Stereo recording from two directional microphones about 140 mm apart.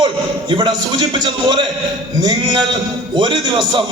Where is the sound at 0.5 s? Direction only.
35° right (ahead or behind).